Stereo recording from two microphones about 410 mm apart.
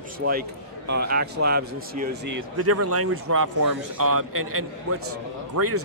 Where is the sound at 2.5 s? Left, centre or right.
Right.